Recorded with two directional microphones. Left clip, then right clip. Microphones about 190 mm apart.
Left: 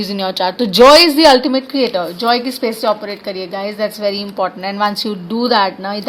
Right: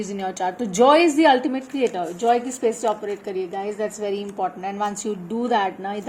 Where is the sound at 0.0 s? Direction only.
40° left (ahead or behind).